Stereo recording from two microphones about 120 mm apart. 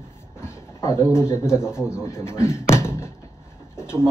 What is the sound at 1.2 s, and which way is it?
Speech, 20° left (ahead or behind).